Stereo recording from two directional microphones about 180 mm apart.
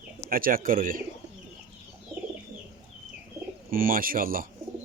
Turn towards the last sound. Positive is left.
turn(degrees=-50)  # may be behind; listen again after turning